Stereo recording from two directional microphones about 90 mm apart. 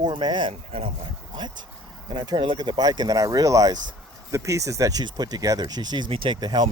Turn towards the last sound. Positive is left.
turn(degrees=-50)  # may be behind; listen again after turning